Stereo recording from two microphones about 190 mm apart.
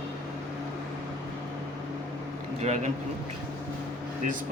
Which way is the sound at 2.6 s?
35° right (ahead or behind).